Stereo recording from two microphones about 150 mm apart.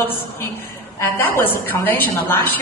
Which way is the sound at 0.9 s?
15° left (ahead or behind).